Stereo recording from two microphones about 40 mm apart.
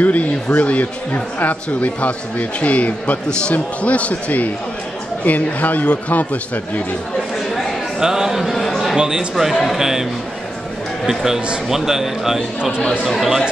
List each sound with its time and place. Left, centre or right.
0.0 s speech: left
8.0 s a man's voice: centre
8.5 s a sound: centre
8.9 s a man's voice: centre
9.3 s a man's voice: centre
11.1 s a man's voice: centre